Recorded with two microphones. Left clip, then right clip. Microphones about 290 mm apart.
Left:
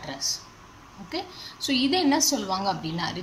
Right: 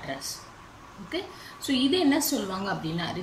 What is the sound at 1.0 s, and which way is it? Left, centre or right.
A woman's voice, centre.